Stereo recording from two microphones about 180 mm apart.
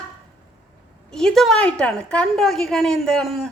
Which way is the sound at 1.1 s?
5° left (ahead or behind).